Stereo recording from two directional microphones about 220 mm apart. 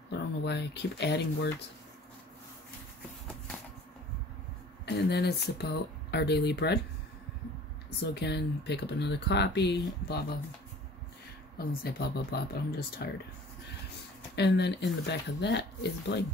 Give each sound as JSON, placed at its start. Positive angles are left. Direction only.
{"t": 0.1, "sound": "speech", "side_deg": 50}
{"t": 4.8, "sound": "speech", "side_deg": 50}
{"t": 8.0, "sound": "speech", "side_deg": 50}
{"t": 11.5, "sound": "speech", "side_deg": 45}
{"t": 14.3, "sound": "speech", "side_deg": 50}